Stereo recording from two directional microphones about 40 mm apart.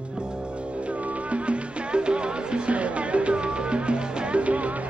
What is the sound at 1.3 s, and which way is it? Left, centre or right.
Music, right.